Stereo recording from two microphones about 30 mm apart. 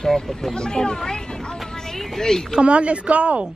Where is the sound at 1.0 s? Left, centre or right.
Left.